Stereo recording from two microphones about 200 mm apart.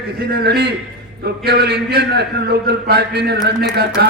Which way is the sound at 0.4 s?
55° right (ahead or behind).